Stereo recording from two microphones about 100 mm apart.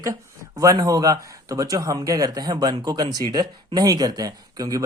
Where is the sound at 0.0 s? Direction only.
35° right (ahead or behind).